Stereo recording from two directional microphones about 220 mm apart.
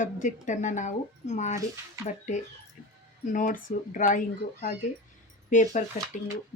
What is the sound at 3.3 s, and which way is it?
Speech, 35° left (ahead or behind).